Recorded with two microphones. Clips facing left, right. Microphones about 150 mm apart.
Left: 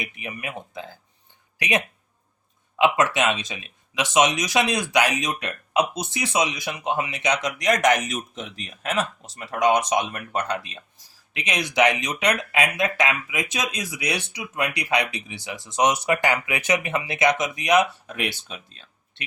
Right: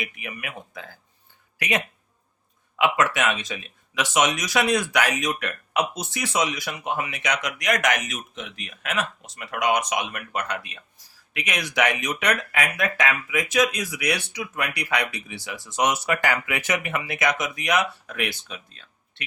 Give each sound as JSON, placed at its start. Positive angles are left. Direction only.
{"t": 0.0, "sound": "speech", "side_deg": 25}